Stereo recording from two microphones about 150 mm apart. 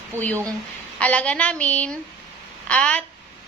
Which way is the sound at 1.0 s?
10° left (ahead or behind).